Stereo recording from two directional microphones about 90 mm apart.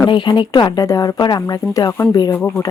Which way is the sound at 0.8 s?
40° left (ahead or behind).